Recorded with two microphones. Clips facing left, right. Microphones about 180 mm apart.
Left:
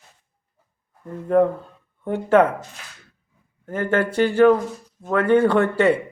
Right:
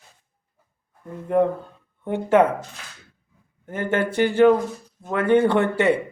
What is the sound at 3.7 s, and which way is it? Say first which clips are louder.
Speech: left 2 dB; 20° right (ahead or behind).